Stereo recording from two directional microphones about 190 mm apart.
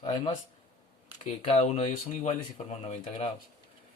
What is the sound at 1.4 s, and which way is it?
Speech, 30° left (ahead or behind).